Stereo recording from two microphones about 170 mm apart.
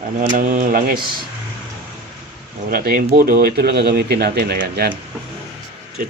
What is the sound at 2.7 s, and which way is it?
Speech, 60° right (ahead or behind).